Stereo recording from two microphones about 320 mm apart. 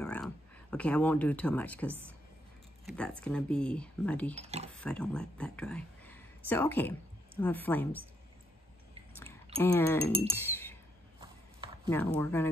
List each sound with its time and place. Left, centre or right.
0.0 s a sound: centre
1.9 s speech: centre
4.4 s speech: centre
4.7 s speech: centre
9.6 s speech: centre
10.3 s chink: centre
11.1 s a sound: centre
11.9 s speech: centre